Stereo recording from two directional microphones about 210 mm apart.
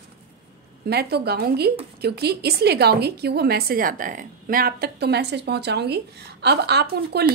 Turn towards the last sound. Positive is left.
turn(degrees=-50)  # may be behind; listen again after turning